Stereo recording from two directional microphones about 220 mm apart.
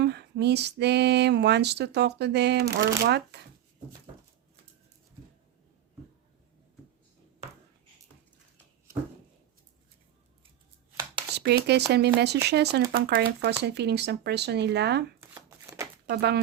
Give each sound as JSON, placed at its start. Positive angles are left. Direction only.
{"t": 0.0, "sound": "female singing", "side_deg": -50}
{"t": 11.3, "sound": "speech", "side_deg": -50}
{"t": 11.9, "sound": "female singing", "side_deg": -50}
{"t": 15.2, "sound": "shuffling cards", "side_deg": -15}
{"t": 16.0, "sound": "female singing", "side_deg": -50}